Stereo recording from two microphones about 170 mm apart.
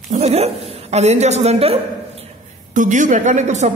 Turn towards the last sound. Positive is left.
turn(degrees=-40)  # may be behind; listen again after turning